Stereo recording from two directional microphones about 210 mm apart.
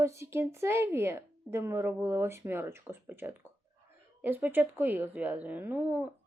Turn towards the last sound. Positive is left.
turn(degrees=-10)  # may be behind; listen again after turning